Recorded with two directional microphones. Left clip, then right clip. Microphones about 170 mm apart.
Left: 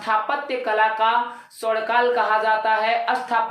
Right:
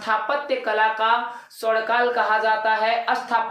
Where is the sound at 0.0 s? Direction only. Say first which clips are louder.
Left 1 dB; centre (ahead or behind).